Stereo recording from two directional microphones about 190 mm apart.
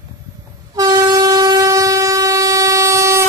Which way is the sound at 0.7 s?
20° right (ahead or behind).